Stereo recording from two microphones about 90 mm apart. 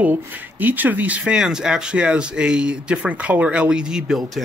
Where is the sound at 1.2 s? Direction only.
5° right (ahead or behind).